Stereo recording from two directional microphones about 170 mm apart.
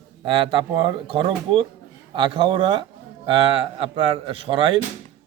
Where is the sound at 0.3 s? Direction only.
30° right (ahead or behind).